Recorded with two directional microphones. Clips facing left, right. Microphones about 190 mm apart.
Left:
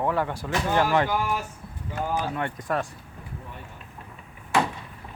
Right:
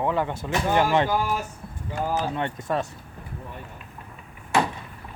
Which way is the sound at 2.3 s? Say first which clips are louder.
Right 1 dB; 25° right (ahead or behind).